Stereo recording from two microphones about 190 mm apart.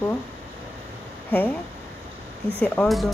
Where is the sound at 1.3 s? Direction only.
10° left (ahead or behind).